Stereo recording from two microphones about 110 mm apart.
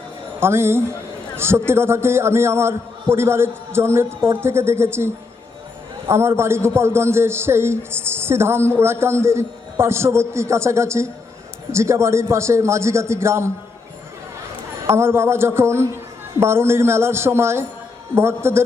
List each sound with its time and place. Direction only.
0.3 s a man's voice: 20° right (ahead or behind)
14.8 s a man's voice: 25° right (ahead or behind)